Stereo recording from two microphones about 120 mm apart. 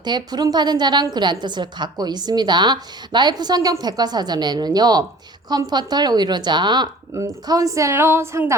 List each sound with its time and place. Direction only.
0.0 s a woman's voice: 35° right (ahead or behind)